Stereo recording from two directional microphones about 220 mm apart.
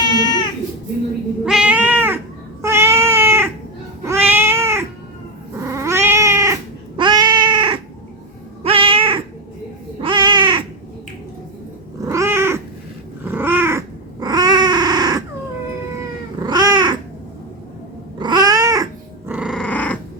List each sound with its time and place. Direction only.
0.1 s a sound: 20° left (ahead or behind)
1.5 s cat: 5° right (ahead or behind); by 9.2 s 25° right (ahead or behind)
10.0 s crow: 20° right (ahead or behind)
12.0 s cat: 15° right (ahead or behind)
13.2 s a sound: 10° right (ahead or behind)
16.4 s cat: 15° right (ahead or behind)
18.2 s cat: 20° right (ahead or behind); by 20.0 s 5° left (ahead or behind)